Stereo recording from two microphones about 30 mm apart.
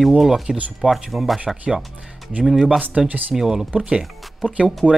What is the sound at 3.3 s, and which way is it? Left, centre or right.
Speech, centre.